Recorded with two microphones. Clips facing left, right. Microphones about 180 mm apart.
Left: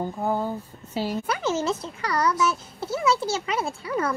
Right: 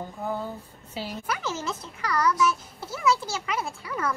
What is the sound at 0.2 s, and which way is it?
Speech, 45° left (ahead or behind).